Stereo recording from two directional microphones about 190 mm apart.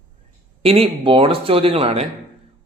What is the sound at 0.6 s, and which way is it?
Speech, 30° right (ahead or behind).